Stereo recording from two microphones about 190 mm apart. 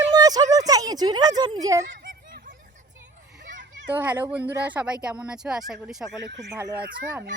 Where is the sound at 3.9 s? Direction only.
10° right (ahead or behind).